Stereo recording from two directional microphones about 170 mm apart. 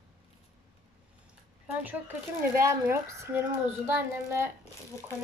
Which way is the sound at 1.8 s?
10° right (ahead or behind).